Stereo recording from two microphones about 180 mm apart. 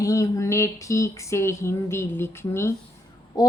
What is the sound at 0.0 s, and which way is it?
A woman's voice, 20° left (ahead or behind).